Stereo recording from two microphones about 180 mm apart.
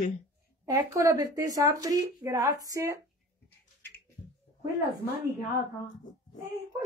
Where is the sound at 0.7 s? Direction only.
15° right (ahead or behind).